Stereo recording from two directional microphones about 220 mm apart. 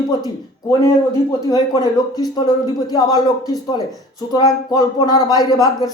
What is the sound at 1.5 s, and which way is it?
Speech, 15° left (ahead or behind).